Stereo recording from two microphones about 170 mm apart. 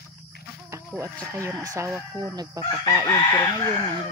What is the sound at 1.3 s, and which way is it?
Speech, 20° right (ahead or behind).